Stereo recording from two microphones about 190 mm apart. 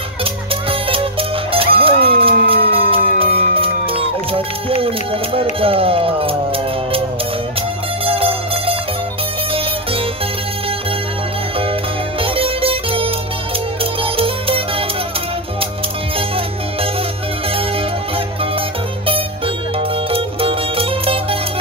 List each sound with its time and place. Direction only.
0.2 s music: 30° right (ahead or behind)
8.0 s music: 30° right (ahead or behind)
12.2 s music: 30° right (ahead or behind)
16.2 s music: 30° right (ahead or behind)
19.0 s music: 30° right (ahead or behind)